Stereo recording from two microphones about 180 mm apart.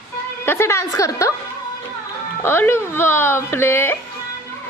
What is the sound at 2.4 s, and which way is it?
Speech, 10° left (ahead or behind).